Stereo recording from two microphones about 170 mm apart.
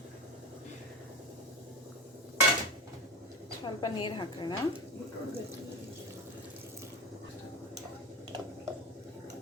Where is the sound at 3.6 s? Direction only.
25° left (ahead or behind).